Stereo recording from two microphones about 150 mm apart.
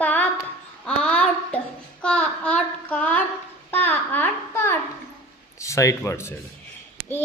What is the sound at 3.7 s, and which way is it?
Babbling, 15° left (ahead or behind).